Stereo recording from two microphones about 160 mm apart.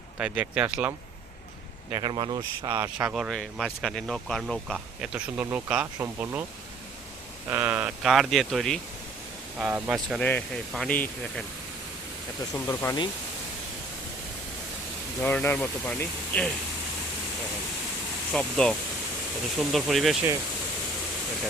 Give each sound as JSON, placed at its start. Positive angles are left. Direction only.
{"t": 0.2, "sound": "speech", "side_deg": -5}
{"t": 1.9, "sound": "speech", "side_deg": -30}
{"t": 2.7, "sound": "speech", "side_deg": -10}
{"t": 7.5, "sound": "speech", "side_deg": -10}
{"t": 9.6, "sound": "speech", "side_deg": -10}
{"t": 10.2, "sound": "speech", "side_deg": 5}
{"t": 12.5, "sound": "speech", "side_deg": 15}
{"t": 15.2, "sound": "speech", "side_deg": 10}
{"t": 18.3, "sound": "speech", "side_deg": 5}